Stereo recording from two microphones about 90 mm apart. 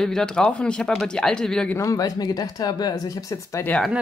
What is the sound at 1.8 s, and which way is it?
Speech, 40° left (ahead or behind).